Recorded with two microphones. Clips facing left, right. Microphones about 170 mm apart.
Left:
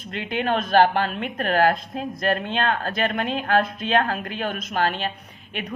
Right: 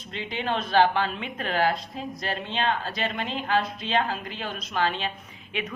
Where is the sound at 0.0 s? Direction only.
55° left (ahead or behind).